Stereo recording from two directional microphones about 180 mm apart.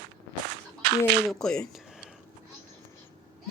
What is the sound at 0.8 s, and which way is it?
Speech, 65° right (ahead or behind).